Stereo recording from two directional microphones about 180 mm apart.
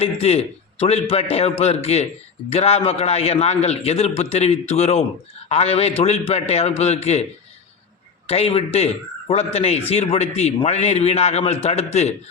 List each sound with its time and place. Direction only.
0.0 s a man's voice: 35° left (ahead or behind)
8.3 s a man's voice: 35° left (ahead or behind)